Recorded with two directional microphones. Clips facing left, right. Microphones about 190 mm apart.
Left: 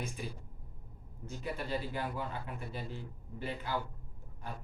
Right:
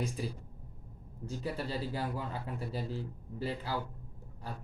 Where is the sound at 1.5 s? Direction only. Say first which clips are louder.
Left 2 dB; 35° right (ahead or behind).